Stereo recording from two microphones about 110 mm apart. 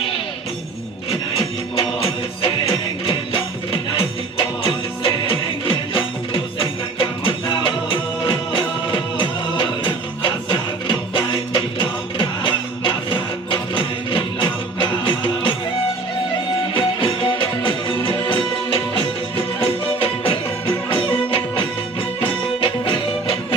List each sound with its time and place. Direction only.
1.4 s music: 55° left (ahead or behind)
16.7 s music: 50° left (ahead or behind)